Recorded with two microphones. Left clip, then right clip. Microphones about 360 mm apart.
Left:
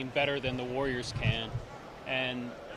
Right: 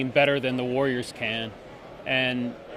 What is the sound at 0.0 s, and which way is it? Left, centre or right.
Speech, right.